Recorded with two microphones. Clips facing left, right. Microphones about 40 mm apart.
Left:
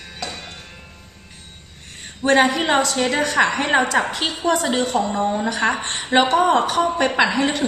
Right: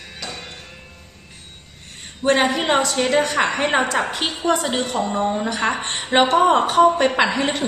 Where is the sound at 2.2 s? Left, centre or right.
Centre.